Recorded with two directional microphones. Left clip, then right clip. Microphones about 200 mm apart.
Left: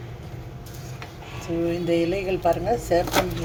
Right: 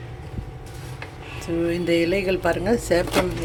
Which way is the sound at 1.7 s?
30° right (ahead or behind).